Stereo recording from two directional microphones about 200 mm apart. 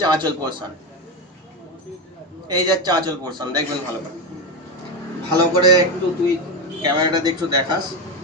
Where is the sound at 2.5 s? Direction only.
20° right (ahead or behind).